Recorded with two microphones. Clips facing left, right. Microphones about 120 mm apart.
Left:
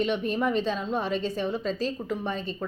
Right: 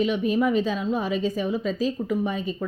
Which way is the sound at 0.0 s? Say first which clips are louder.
Right 4 dB; 5° right (ahead or behind).